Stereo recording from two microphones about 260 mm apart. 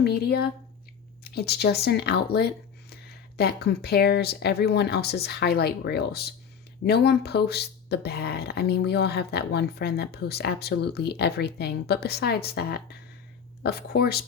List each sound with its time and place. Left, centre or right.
0.0 s speech: left